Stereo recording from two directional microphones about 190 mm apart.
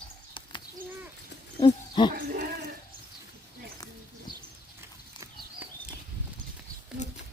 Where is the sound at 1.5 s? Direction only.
25° left (ahead or behind).